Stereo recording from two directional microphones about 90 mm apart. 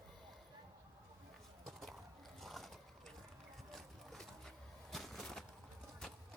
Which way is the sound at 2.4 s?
Centre (ahead or behind).